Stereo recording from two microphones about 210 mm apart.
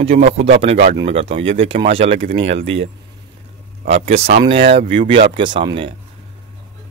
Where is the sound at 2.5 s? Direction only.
65° right (ahead or behind).